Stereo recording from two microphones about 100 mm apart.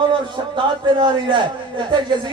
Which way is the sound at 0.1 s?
55° right (ahead or behind).